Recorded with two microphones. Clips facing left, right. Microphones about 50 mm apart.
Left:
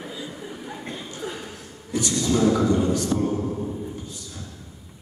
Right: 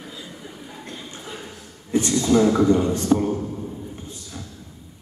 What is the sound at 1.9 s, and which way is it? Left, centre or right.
A man's voice, right.